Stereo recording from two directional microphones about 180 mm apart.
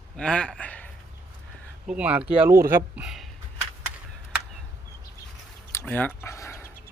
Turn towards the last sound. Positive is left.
turn(degrees=15)  # may be behind; listen again after turning